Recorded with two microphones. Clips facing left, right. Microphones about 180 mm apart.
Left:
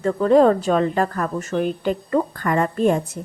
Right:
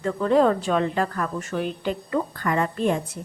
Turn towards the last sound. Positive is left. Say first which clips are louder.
# left 5 dB
turn(degrees=45)  # may be behind; listen again after turning